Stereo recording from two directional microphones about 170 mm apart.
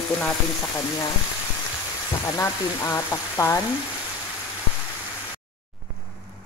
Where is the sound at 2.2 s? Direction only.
20° left (ahead or behind).